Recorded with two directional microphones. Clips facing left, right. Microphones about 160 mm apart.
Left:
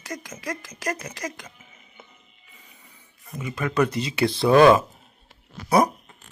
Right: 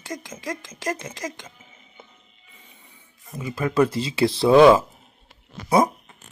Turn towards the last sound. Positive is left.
turn(degrees=-20)  # may be behind; listen again after turning